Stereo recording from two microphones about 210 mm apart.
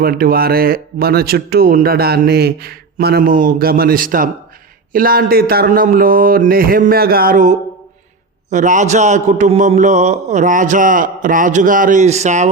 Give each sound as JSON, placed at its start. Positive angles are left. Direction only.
{"t": 0.0, "sound": "a man's voice", "side_deg": -45}